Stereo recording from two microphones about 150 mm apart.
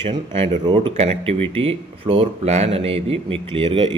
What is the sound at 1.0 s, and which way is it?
Speech, 40° right (ahead or behind).